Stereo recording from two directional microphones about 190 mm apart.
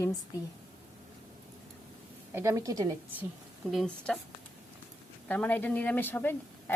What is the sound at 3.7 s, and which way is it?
Speech, centre (ahead or behind).